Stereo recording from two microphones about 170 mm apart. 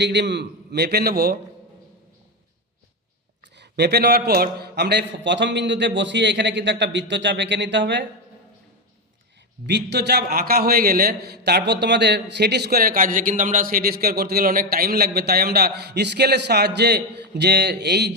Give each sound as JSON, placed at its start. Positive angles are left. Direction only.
{"t": 0.0, "sound": "a man's voice", "side_deg": -90}
{"t": 3.5, "sound": "a man's voice", "side_deg": -85}
{"t": 9.6, "sound": "a man's voice", "side_deg": -90}